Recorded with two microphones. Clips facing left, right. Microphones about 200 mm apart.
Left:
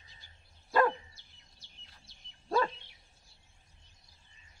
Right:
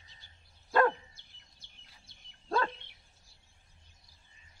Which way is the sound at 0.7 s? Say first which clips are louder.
Right 1 dB; 5° left (ahead or behind).